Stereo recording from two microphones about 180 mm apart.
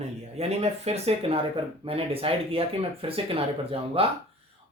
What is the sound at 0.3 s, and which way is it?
Speech, 35° right (ahead or behind).